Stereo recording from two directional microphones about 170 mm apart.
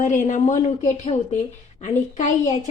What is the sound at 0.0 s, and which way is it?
A woman's voice, 45° left (ahead or behind).